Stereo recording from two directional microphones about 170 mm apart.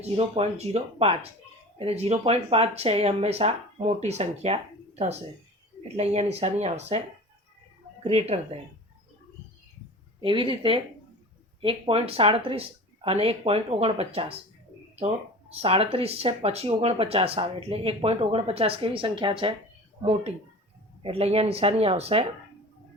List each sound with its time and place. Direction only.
0.0 s speech: 35° right (ahead or behind)
6.0 s speech: 40° right (ahead or behind)
8.0 s speech: 35° right (ahead or behind)
10.2 s speech: 30° right (ahead or behind)
15.6 s speech: 35° right (ahead or behind)